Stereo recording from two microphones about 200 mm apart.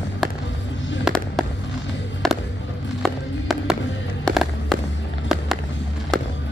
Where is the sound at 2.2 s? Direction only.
Centre (ahead or behind).